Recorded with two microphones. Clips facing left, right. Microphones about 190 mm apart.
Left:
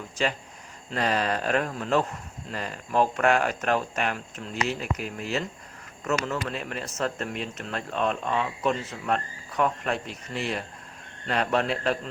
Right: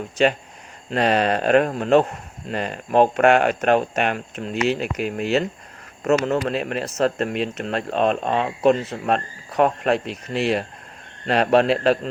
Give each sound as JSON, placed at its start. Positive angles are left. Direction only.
{"t": 0.2, "sound": "speech", "side_deg": -65}